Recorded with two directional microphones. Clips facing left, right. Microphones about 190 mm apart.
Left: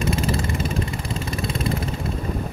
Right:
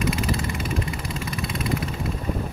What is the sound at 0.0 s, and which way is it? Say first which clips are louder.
Vehicle: left 2 dB; 30° left (ahead or behind).